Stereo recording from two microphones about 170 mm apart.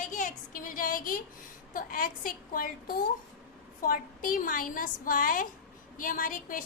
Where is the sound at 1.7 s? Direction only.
55° left (ahead or behind).